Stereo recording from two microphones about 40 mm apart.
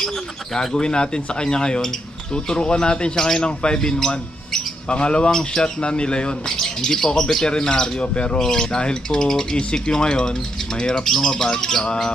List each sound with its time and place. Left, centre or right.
0.6 s speech: left